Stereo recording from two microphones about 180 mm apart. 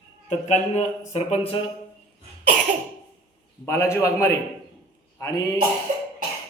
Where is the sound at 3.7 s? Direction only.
15° left (ahead or behind).